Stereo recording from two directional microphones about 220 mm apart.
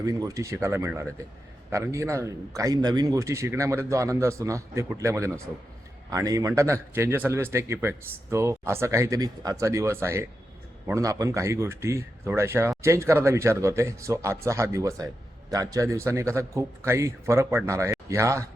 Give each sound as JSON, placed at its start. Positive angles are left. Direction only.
{"t": 0.0, "sound": "a man's voice", "side_deg": -15}